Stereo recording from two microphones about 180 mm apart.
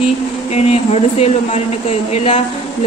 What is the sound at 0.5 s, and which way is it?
A woman's voice, 35° left (ahead or behind).